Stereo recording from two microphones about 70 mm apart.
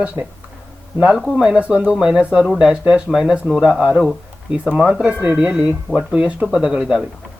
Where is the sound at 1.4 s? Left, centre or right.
Centre.